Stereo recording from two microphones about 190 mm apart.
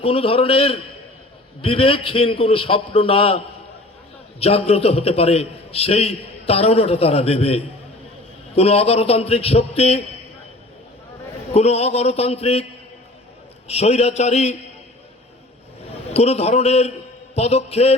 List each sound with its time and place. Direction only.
0.0 s a man's voice: 30° left (ahead or behind)
11.5 s a man's voice: 35° left (ahead or behind)
13.7 s a man's voice: 35° left (ahead or behind)
16.1 s a man's voice: 35° left (ahead or behind)